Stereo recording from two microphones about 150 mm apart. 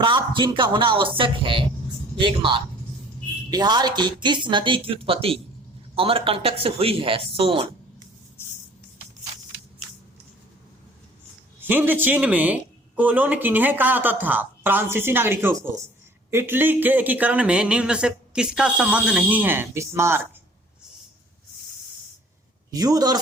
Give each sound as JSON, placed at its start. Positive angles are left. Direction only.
{"t": 0.0, "sound": "speech", "side_deg": -30}
{"t": 11.6, "sound": "speech", "side_deg": -10}
{"t": 22.7, "sound": "a man's voice", "side_deg": -25}